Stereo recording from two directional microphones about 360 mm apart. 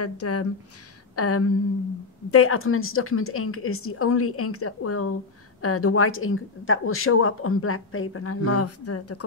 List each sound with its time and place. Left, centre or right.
0.0 s a woman's voice: left